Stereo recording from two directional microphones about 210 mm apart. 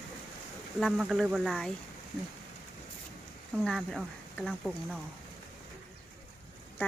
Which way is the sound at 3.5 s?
Centre (ahead or behind).